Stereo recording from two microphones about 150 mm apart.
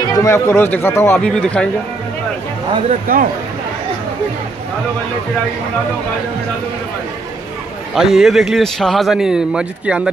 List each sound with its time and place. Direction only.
0.1 s speech: 20° left (ahead or behind)
3.1 s speech: 75° right (ahead or behind)
7.9 s speech: centre (ahead or behind)